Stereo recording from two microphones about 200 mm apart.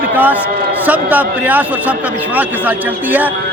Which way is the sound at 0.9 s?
10° right (ahead or behind).